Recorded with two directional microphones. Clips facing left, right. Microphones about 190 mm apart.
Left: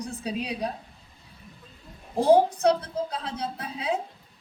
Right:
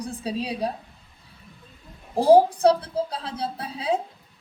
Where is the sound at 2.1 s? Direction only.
30° right (ahead or behind).